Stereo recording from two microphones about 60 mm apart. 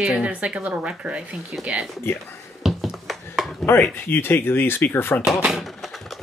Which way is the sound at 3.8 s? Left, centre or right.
Left.